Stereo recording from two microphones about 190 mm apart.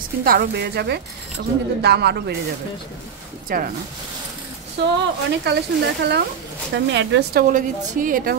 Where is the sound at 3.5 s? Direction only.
50° right (ahead or behind).